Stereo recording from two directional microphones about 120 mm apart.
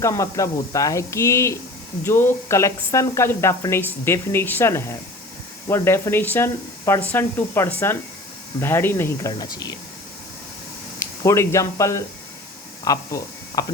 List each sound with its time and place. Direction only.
0.0 s speech: 25° left (ahead or behind)
11.0 s speech: 25° left (ahead or behind)